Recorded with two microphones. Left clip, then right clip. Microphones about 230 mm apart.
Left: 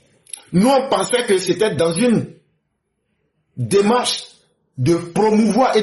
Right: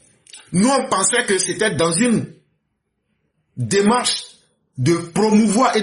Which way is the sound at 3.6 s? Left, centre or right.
Right.